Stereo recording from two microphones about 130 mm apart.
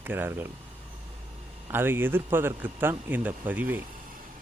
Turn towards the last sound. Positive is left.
turn(degrees=-15)  # may be behind; listen again after turning